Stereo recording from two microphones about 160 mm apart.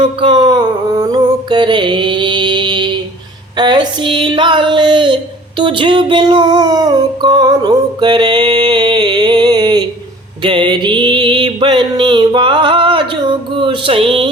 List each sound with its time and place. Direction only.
0.0 s music: 30° right (ahead or behind)
3.6 s a sound: 25° right (ahead or behind)
10.4 s music: 30° right (ahead or behind)